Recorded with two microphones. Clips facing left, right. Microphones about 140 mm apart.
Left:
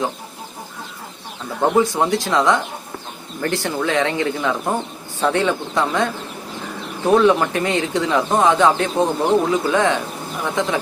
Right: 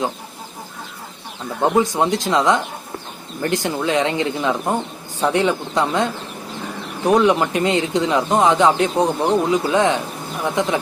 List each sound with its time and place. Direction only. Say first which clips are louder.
1.8 s speech: even; 20° right (ahead or behind)